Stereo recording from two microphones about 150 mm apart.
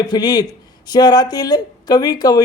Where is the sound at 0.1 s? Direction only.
25° left (ahead or behind).